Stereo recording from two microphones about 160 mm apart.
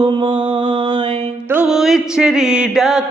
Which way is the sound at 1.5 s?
5° right (ahead or behind).